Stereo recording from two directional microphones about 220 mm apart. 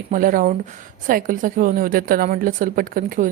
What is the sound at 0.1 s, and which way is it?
A woman's voice, 40° right (ahead or behind).